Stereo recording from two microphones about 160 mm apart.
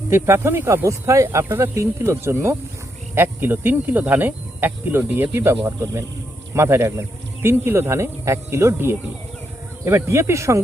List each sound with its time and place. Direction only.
0.1 s speech: 15° right (ahead or behind)